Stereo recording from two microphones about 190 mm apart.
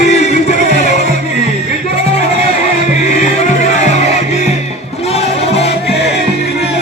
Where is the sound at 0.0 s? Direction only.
35° left (ahead or behind).